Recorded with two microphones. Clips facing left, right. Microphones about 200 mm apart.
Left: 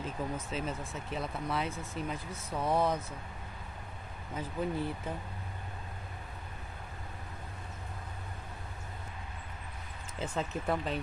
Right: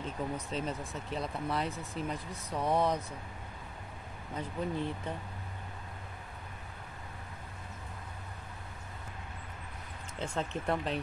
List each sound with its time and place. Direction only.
0.0 s speech: centre (ahead or behind)
4.4 s speech: 5° left (ahead or behind)
10.1 s speech: 5° left (ahead or behind)